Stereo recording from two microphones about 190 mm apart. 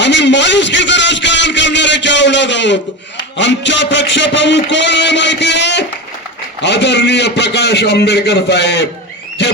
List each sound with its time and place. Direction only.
0.0 s a man's voice: 65° left (ahead or behind)